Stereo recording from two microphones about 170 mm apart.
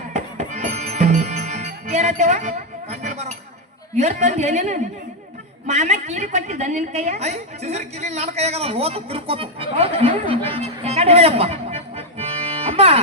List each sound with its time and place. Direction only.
0.1 s music: 40° right (ahead or behind)
3.9 s a woman's voice: 40° right (ahead or behind)